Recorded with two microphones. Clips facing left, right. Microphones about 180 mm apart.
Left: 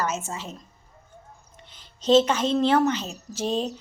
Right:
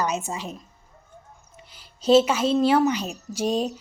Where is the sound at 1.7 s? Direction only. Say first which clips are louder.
Right 2 dB; 10° right (ahead or behind).